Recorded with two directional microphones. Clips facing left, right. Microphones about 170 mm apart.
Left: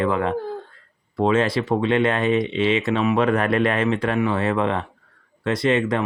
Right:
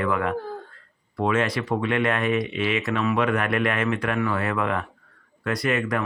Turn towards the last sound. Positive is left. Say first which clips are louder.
# left 4 dB
turn(degrees=25)  # may be behind; listen again after turning